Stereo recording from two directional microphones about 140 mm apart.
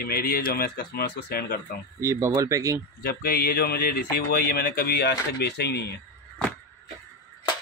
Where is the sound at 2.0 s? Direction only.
20° right (ahead or behind).